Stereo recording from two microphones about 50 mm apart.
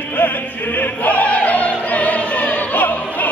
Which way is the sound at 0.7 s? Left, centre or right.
Left.